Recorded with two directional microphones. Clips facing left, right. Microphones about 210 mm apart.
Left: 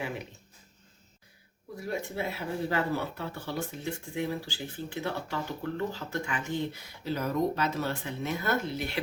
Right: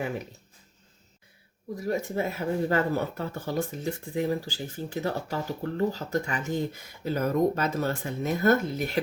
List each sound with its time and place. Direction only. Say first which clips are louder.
1.7 s speech: right 6 dB; 40° right (ahead or behind)